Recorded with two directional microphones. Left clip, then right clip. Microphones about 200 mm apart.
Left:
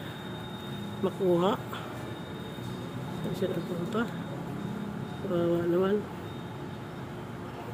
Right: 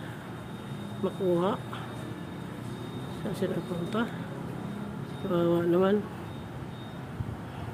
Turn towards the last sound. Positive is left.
turn(degrees=-20)  # may be behind; listen again after turning